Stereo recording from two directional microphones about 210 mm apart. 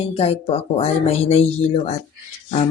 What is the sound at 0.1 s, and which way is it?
Speech, 30° left (ahead or behind).